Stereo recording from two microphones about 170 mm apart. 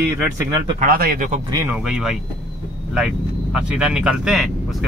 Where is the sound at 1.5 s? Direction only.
15° right (ahead or behind).